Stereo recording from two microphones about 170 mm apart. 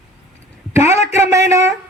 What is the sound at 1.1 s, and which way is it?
Speech, 15° right (ahead or behind).